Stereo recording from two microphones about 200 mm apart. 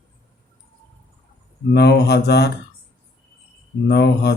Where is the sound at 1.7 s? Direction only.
55° left (ahead or behind).